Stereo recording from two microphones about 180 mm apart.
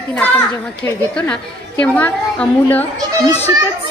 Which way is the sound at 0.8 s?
10° left (ahead or behind).